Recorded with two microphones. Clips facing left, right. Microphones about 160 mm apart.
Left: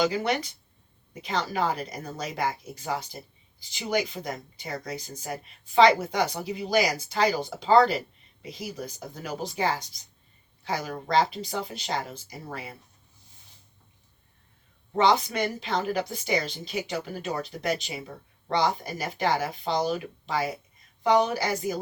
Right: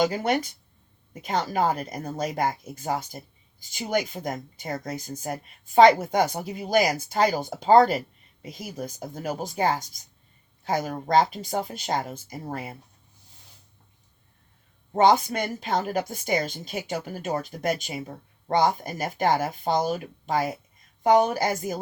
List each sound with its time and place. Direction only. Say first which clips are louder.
0.0 s speech: right 2 dB; 50° right (ahead or behind)
14.9 s speech: right 3 dB; 50° right (ahead or behind)